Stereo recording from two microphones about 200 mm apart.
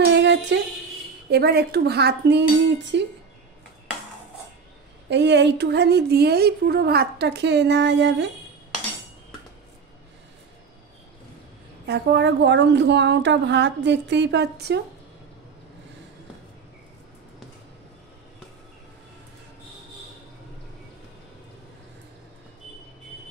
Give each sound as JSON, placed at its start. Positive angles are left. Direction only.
{"t": 0.0, "sound": "a sound", "side_deg": -60}
{"t": 1.3, "sound": "speech", "side_deg": -55}
{"t": 5.1, "sound": "speech", "side_deg": -60}
{"t": 11.8, "sound": "speech", "side_deg": -55}